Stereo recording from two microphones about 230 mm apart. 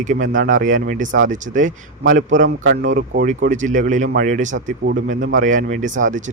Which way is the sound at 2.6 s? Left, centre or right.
Right.